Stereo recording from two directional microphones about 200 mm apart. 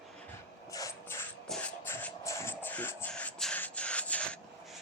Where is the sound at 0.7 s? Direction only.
15° left (ahead or behind).